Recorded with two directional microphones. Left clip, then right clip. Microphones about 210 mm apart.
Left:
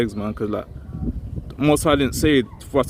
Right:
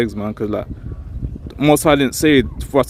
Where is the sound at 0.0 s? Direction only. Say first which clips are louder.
Right 3 dB; 10° right (ahead or behind).